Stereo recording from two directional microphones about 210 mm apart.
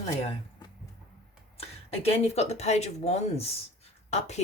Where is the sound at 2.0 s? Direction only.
30° left (ahead or behind).